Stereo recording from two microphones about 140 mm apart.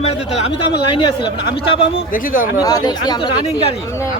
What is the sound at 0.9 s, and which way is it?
A man's voice, 35° left (ahead or behind).